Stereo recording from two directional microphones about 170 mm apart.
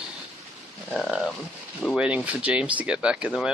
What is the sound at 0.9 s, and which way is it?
Speech, centre (ahead or behind).